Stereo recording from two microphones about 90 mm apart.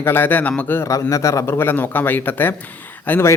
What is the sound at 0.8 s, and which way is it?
Speech, 40° left (ahead or behind).